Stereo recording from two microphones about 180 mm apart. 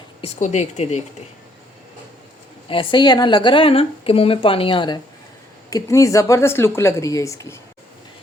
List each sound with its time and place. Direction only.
0.2 s speech: 45° left (ahead or behind)
2.6 s speech: 25° left (ahead or behind)